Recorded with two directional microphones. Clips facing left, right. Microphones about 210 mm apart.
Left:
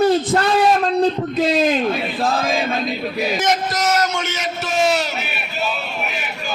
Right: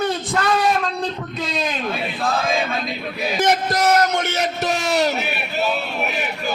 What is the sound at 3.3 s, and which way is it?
Speech, 60° right (ahead or behind).